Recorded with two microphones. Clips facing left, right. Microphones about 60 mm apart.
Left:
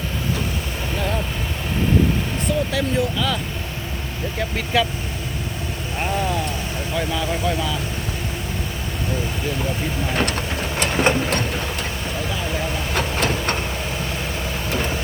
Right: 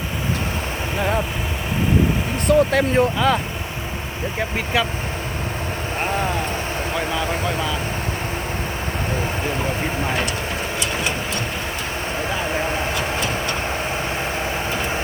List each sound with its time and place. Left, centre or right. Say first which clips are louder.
0.9 s speech: right 3 dB; right
2.5 s speech: right 7 dB; right
4.4 s speech: left 1 dB; centre
6.0 s speech: even; right
9.8 s speech: right 2 dB; right
10.8 s sewing machine: left 8 dB; left
12.2 s a sound: right 3 dB; right
13.1 s vehicle: left 1 dB; left
14.8 s vehicle: right 1 dB; right